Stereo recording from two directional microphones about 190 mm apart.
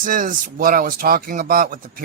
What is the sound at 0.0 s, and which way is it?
Speech, 45° right (ahead or behind).